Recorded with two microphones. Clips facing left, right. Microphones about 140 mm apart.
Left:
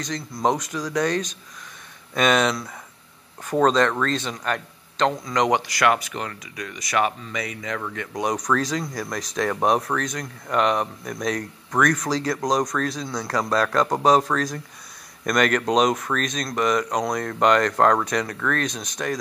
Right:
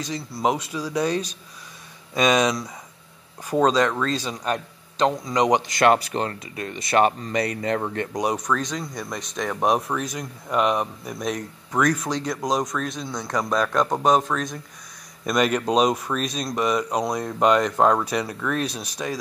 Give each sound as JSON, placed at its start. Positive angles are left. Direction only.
{"t": 0.1, "sound": "speech", "side_deg": -10}
{"t": 8.1, "sound": "speech", "side_deg": -15}
{"t": 8.5, "sound": "speech", "side_deg": 0}
{"t": 15.2, "sound": "speech", "side_deg": -10}